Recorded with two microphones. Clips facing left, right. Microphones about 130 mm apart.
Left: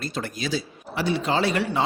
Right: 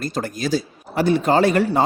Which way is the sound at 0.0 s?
45° right (ahead or behind).